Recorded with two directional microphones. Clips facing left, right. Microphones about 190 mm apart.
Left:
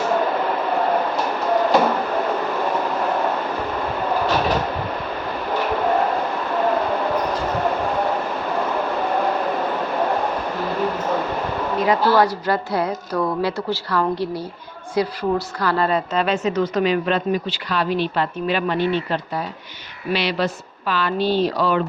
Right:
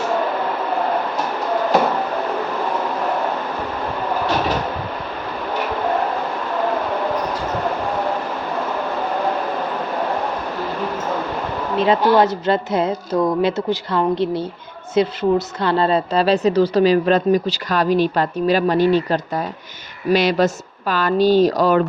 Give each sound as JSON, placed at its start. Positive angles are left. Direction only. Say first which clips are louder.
{"t": 11.8, "sound": "a woman's voice", "louder": "right 3 dB", "side_deg": -25}